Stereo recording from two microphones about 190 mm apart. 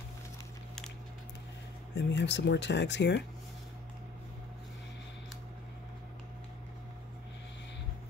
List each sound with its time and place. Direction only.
2.0 s speech: 65° left (ahead or behind)